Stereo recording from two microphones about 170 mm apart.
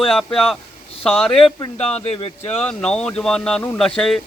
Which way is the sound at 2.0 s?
35° left (ahead or behind).